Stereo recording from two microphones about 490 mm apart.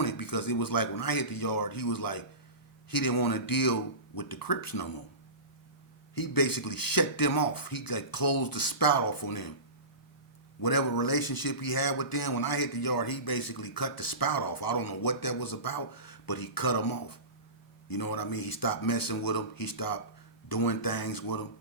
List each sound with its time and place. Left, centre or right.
0.0 s a man's voice: left
6.1 s a man's voice: left
10.6 s a man's voice: left